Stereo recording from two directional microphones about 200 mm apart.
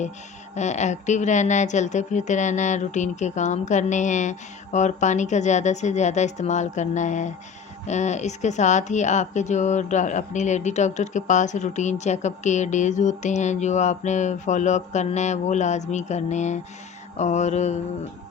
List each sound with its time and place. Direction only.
0.5 s a woman's voice: 35° left (ahead or behind)